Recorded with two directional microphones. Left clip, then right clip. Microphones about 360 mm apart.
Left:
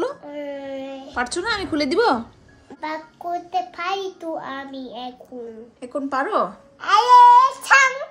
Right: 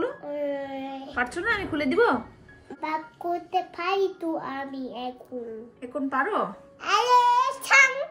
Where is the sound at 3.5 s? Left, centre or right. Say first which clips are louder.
Left 2 dB; centre.